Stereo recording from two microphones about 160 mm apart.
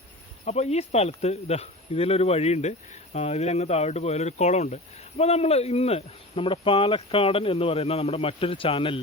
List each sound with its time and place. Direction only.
0.4 s speech: 45° left (ahead or behind)